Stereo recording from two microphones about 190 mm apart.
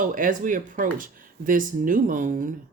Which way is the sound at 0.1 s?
45° right (ahead or behind).